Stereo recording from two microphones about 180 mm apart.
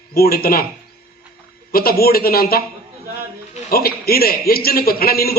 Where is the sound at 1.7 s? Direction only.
55° left (ahead or behind).